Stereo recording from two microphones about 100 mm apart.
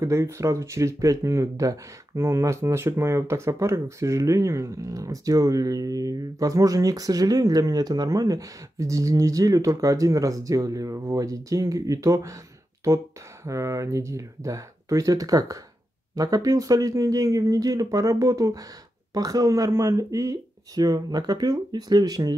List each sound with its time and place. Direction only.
0.0 s speech: 30° right (ahead or behind)